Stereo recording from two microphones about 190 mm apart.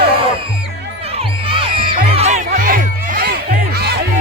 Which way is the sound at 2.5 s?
45° right (ahead or behind).